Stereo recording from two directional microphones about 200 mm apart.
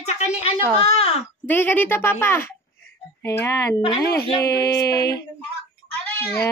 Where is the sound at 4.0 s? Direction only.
50° left (ahead or behind).